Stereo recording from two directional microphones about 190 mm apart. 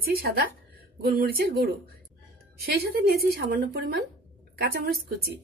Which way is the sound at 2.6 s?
55° right (ahead or behind).